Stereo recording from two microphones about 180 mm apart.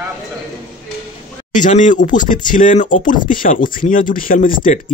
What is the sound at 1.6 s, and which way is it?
Speech, 45° left (ahead or behind).